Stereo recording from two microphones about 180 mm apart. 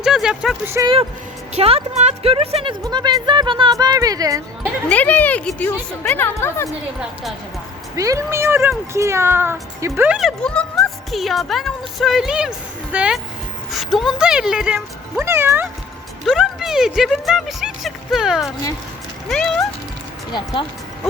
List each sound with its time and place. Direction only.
0.0 s a sound: 5° right (ahead or behind)
0.8 s speech: 15° right (ahead or behind)
1.5 s speech: 35° right (ahead or behind)
2.8 s speech: 20° right (ahead or behind)
4.9 s speech: 10° left (ahead or behind)
7.9 s speech: 15° right (ahead or behind)
10.2 s speech: centre (ahead or behind)
15.2 s speech: 15° right (ahead or behind)
16.2 s speech: centre (ahead or behind)
20.3 s speech: 20° left (ahead or behind)